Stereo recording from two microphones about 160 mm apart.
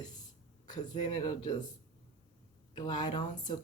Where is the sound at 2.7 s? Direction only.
30° left (ahead or behind).